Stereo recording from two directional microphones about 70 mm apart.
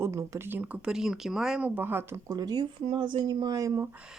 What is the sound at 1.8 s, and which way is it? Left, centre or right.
Speech, right.